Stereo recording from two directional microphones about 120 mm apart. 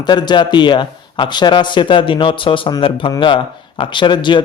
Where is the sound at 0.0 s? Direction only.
40° left (ahead or behind).